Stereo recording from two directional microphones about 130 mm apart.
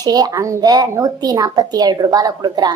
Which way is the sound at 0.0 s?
30° right (ahead or behind).